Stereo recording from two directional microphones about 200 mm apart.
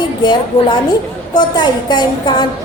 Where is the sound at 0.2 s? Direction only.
20° left (ahead or behind).